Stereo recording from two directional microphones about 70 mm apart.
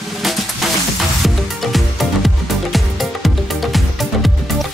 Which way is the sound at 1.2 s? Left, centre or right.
Centre.